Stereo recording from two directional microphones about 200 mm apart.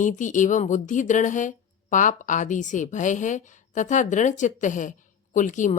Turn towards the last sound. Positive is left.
turn(degrees=40)  # may be behind; listen again after turning